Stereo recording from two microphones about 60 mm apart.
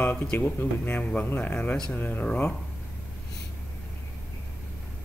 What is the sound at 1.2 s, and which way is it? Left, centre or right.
Speech, left.